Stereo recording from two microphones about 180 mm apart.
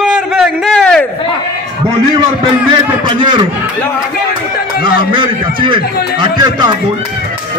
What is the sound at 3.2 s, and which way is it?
Speech, 25° right (ahead or behind).